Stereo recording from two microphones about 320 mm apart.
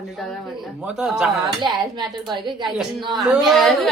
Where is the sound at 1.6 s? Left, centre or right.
Centre.